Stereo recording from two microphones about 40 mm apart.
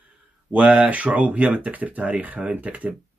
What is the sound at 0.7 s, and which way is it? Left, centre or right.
Speech, right.